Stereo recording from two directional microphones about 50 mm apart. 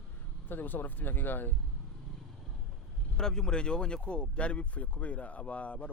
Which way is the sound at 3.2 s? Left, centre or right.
Centre.